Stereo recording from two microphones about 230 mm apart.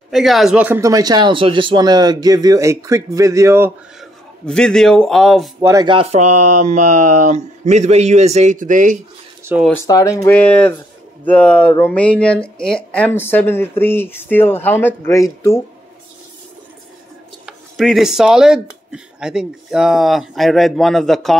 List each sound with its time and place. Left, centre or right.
0.1 s speech: centre
4.5 s speech: centre
5.6 s speech: centre; by 9.0 s right
9.4 s a sound: centre
9.8 s speech: centre
17.5 s speech: centre